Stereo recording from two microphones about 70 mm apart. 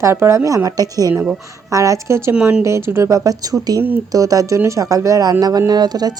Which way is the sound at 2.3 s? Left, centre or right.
Centre.